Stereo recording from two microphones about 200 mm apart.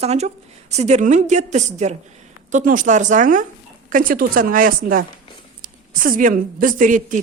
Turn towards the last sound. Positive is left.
turn(degrees=-40)  # may be behind; listen again after turning